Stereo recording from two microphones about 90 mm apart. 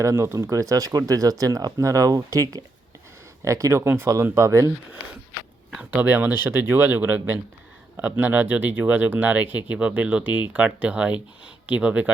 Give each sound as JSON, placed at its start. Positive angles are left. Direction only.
{"t": 0.0, "sound": "speech", "side_deg": -30}
{"t": 5.9, "sound": "speech", "side_deg": -20}